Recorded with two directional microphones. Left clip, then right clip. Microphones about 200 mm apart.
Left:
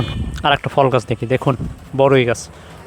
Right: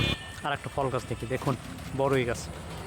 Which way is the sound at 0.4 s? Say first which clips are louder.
Left 16 dB; 45° left (ahead or behind).